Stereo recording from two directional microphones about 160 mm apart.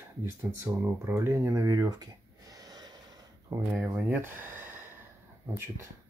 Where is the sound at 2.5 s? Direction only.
25° right (ahead or behind).